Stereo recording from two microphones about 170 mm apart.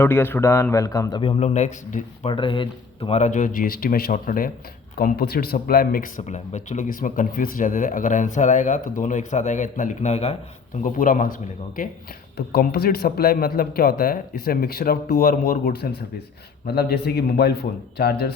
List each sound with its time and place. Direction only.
0.0 s a man's voice: 15° left (ahead or behind)
1.2 s speech: 35° left (ahead or behind)
2.2 s speech: 30° left (ahead or behind)
10.8 s speech: 50° left (ahead or behind)
12.5 s a man's voice: 65° left (ahead or behind)